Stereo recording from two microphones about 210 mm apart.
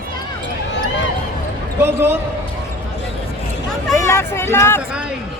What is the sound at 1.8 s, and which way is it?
Speech, 10° right (ahead or behind).